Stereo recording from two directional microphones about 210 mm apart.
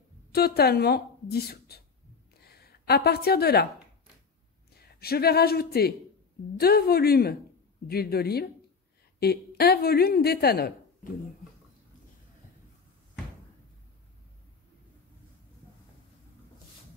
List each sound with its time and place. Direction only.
0.3 s a woman's voice: 50° left (ahead or behind)
4.7 s a woman's voice: 50° left (ahead or behind)